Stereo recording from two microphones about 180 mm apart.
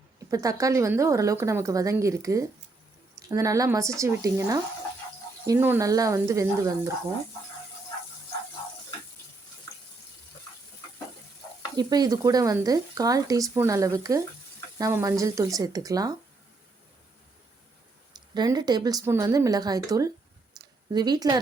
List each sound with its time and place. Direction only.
0.3 s a woman's voice: 20° right (ahead or behind)
11.8 s speech: 20° right (ahead or behind)
18.1 s speech: 25° right (ahead or behind)
20.6 s a sound: 25° right (ahead or behind)
20.9 s speech: 25° right (ahead or behind)